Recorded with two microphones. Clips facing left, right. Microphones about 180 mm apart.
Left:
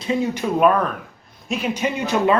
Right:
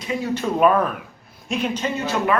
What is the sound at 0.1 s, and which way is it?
Speech, 20° left (ahead or behind).